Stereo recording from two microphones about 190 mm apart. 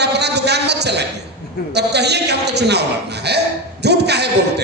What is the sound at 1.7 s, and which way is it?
A man's voice, 60° right (ahead or behind).